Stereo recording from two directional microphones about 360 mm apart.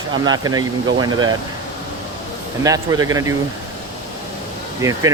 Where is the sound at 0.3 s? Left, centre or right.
Centre.